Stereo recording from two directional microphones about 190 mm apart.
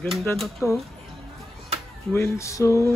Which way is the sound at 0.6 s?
15° left (ahead or behind).